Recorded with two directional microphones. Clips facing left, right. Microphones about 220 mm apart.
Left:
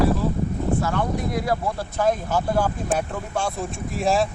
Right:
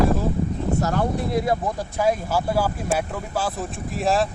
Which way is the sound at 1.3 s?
25° right (ahead or behind).